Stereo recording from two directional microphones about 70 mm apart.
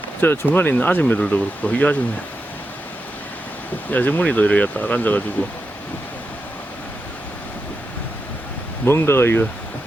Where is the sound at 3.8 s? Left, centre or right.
Left.